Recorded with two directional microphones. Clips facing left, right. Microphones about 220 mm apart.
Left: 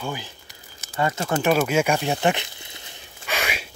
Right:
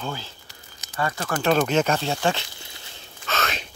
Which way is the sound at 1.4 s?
10° left (ahead or behind).